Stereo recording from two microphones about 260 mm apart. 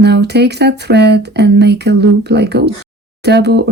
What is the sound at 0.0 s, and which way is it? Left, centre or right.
Speech, right.